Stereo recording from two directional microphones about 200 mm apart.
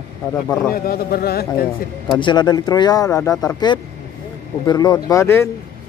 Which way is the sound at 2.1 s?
20° left (ahead or behind).